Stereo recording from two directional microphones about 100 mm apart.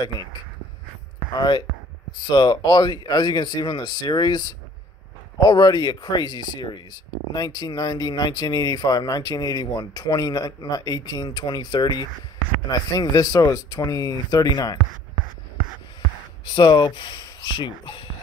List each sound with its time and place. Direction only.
2.1 s speech: 45° left (ahead or behind)
16.4 s speech: 45° left (ahead or behind)